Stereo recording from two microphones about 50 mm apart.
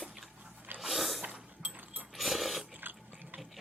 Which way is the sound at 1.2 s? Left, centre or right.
Right.